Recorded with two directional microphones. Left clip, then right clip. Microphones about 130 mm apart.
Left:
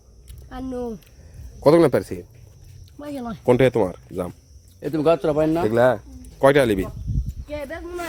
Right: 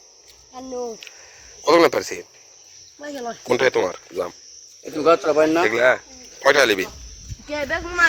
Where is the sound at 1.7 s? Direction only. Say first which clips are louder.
Right 4 dB; 30° left (ahead or behind).